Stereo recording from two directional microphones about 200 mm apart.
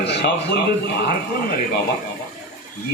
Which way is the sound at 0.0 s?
55° left (ahead or behind).